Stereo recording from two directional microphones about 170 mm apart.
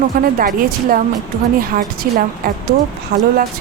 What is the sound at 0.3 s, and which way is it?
A woman's voice, 55° right (ahead or behind).